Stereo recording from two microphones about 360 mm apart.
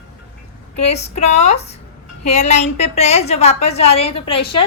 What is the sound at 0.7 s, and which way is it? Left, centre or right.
A woman's voice, centre.